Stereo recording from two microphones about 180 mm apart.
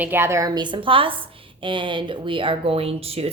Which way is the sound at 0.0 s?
10° right (ahead or behind).